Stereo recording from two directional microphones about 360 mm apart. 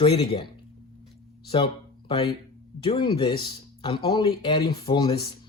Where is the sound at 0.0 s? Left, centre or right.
Centre.